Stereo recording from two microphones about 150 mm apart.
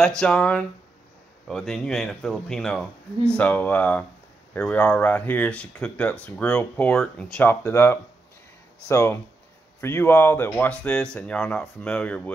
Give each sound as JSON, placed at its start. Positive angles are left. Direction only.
{"t": 0.0, "sound": "speech", "side_deg": 5}